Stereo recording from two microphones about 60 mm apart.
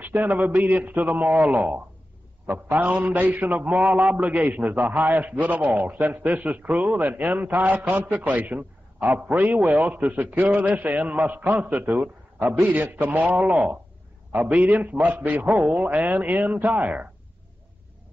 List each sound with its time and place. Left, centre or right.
0.0 s a man's voice: right